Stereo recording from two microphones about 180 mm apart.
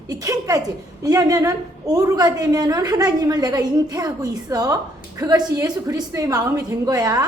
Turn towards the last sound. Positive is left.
turn(degrees=-20)  # may be behind; listen again after turning